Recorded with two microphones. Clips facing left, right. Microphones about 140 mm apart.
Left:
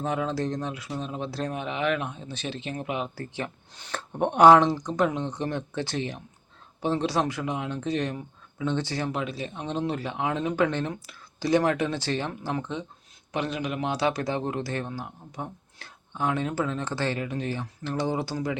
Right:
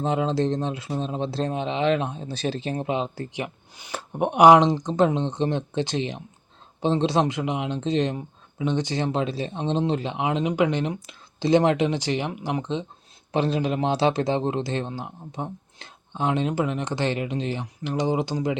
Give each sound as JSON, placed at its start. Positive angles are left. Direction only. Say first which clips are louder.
{"t": 0.0, "sound": "speech", "louder": "right 5 dB", "side_deg": -25}
{"t": 13.3, "sound": "speech", "louder": "right 6 dB", "side_deg": -30}